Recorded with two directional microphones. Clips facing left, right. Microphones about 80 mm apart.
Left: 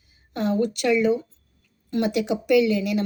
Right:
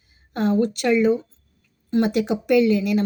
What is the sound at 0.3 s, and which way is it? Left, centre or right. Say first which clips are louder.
A woman's voice: right 3 dB; right.